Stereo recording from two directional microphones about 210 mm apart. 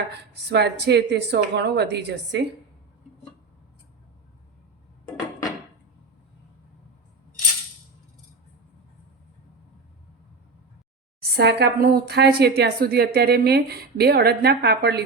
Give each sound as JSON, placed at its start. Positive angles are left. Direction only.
{"t": 0.5, "sound": "a woman's voice", "side_deg": -55}
{"t": 11.2, "sound": "a woman's voice", "side_deg": -50}